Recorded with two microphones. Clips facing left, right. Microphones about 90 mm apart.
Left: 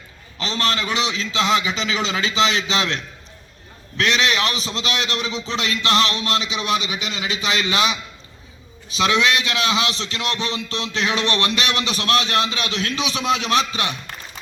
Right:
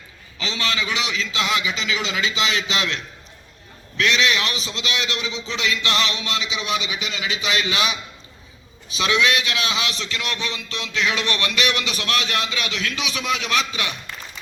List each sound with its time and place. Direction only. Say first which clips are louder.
0.3 s a man's voice: left 3 dB; 40° left (ahead or behind)